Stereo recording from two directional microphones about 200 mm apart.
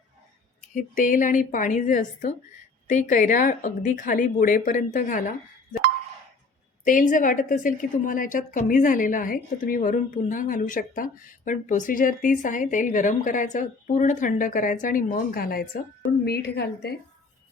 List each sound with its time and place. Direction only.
0.7 s a woman's voice: 40° left (ahead or behind)
6.8 s a woman's voice: 40° left (ahead or behind)